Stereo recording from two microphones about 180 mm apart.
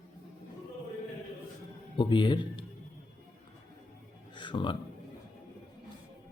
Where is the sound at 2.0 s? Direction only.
25° left (ahead or behind).